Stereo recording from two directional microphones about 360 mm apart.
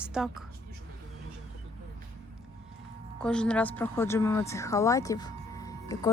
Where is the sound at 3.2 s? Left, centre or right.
Centre.